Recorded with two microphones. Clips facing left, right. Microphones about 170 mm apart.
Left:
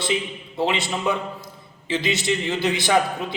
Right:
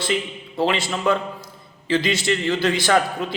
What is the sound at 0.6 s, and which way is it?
A man's voice, 20° left (ahead or behind).